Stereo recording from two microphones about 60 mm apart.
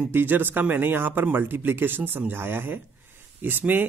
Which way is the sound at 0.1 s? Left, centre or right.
Right.